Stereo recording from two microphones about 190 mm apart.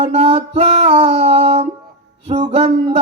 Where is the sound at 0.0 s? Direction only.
30° right (ahead or behind).